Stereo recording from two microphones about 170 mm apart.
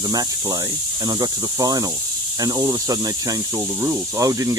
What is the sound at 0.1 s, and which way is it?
Speech, 25° right (ahead or behind).